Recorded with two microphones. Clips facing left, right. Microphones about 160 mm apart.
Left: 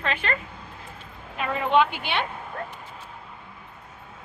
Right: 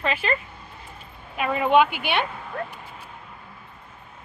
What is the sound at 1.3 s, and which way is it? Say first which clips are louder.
Speech: right 3 dB; 15° right (ahead or behind).